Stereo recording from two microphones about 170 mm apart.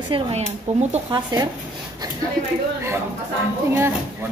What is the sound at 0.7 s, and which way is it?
Speech, 40° right (ahead or behind).